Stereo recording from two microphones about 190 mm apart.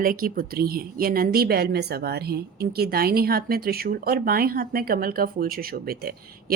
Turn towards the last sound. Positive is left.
turn(degrees=-55)  # may be behind; listen again after turning